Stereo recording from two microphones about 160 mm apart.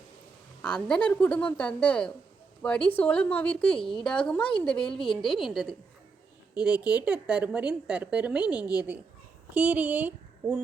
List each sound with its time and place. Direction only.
0.6 s a woman's voice: 5° left (ahead or behind); by 10.6 s 10° right (ahead or behind)